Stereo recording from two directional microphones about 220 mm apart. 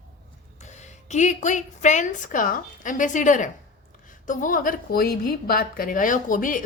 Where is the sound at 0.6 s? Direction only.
30° left (ahead or behind).